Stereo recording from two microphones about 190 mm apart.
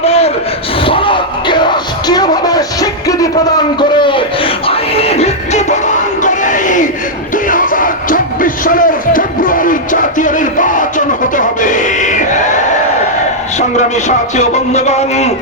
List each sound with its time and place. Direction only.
0.0 s a sound: 35° left (ahead or behind)
0.9 s music: 25° left (ahead or behind)
3.8 s a sound: 25° left (ahead or behind)
4.6 s music: 30° left (ahead or behind)
6.2 s crowd: 40° left (ahead or behind)
7.4 s music: 45° left (ahead or behind)
13.6 s speech: 40° left (ahead or behind)